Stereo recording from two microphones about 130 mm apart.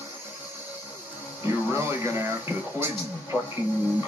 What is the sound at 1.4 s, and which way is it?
Speech, 20° right (ahead or behind).